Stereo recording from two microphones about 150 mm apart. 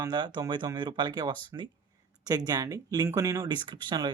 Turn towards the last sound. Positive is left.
turn(degrees=-30)  # may be behind; listen again after turning